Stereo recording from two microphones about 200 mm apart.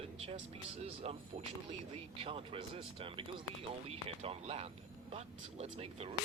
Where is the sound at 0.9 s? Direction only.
30° right (ahead or behind).